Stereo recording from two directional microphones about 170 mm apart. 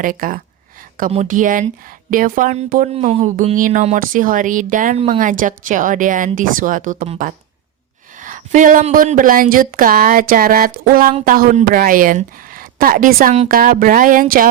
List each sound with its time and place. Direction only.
0.0 s speech: 55° right (ahead or behind)
2.9 s speech: 35° right (ahead or behind)
8.2 s speech: 50° right (ahead or behind)